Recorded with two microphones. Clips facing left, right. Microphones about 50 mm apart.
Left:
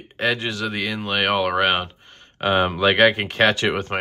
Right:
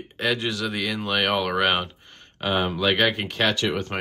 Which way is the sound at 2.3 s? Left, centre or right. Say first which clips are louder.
Left 5 dB; left.